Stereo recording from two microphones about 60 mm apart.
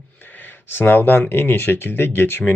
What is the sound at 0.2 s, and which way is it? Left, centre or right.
Speech, left.